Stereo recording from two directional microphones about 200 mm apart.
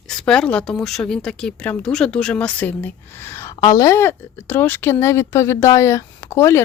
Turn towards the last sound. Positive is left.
turn(degrees=15)  # may be behind; listen again after turning